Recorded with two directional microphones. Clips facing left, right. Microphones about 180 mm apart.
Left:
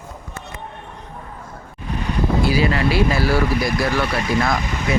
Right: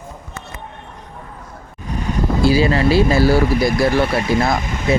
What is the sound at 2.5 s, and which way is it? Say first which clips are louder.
Speech: right 8 dB; 30° right (ahead or behind).